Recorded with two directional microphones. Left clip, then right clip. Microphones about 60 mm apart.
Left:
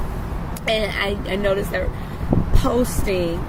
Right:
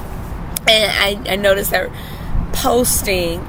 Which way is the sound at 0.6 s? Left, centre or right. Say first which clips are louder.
Right 8 dB; right.